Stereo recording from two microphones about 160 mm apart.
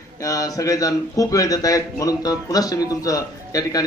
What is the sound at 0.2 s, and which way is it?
A man's voice, 20° left (ahead or behind).